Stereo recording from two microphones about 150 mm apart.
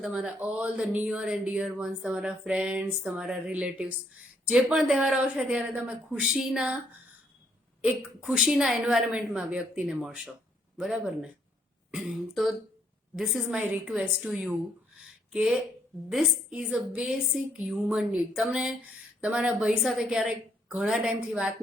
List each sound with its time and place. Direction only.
0.0 s speech: 5° right (ahead or behind)
8.2 s a woman's voice: centre (ahead or behind)
15.0 s a sound: 5° right (ahead or behind)
16.0 s a woman's voice: centre (ahead or behind)